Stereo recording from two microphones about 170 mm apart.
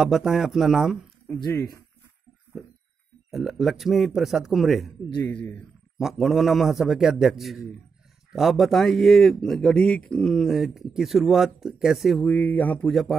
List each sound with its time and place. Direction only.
0.0 s a man's voice: centre (ahead or behind)
1.4 s speech: 20° left (ahead or behind)
2.5 s a sound: centre (ahead or behind)
3.3 s a man's voice: centre (ahead or behind)